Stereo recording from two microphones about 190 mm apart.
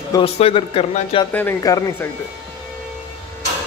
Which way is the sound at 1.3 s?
15° left (ahead or behind).